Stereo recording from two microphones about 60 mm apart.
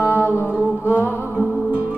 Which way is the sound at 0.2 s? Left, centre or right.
Right.